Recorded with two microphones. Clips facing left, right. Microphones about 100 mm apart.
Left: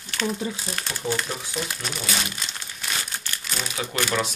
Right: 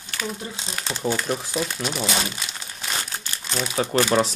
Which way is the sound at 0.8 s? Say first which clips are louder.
Right 5 dB; 20° right (ahead or behind).